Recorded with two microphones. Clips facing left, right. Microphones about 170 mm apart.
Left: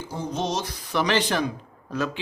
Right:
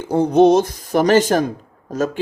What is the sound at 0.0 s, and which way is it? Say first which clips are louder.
Speech: right 16 dB; 60° right (ahead or behind).